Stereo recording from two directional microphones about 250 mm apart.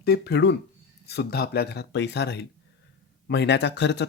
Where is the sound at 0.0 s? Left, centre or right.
Left.